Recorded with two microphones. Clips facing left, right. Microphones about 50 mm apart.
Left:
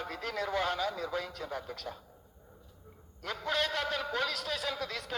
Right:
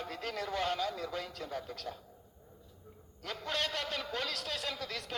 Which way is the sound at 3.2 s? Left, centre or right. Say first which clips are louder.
Left 4 dB; left.